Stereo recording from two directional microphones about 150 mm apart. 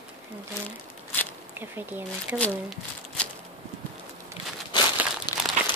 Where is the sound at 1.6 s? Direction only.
15° right (ahead or behind).